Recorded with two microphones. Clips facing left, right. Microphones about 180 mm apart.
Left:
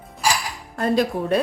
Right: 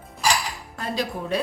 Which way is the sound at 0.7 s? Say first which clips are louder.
Left 8 dB; 50° left (ahead or behind).